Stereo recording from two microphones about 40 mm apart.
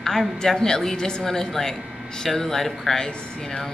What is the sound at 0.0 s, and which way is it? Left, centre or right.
Speech, centre.